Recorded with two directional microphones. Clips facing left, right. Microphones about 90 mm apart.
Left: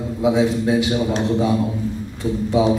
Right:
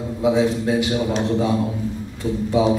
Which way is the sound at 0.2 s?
15° left (ahead or behind).